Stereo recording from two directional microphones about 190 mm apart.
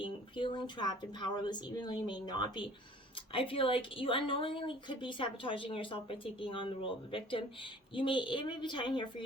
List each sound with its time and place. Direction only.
0.0 s a woman's voice: 25° left (ahead or behind)